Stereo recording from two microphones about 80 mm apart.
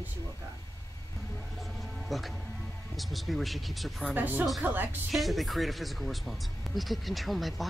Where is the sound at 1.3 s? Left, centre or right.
Centre.